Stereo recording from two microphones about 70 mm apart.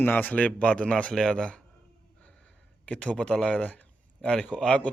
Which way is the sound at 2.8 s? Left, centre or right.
Centre.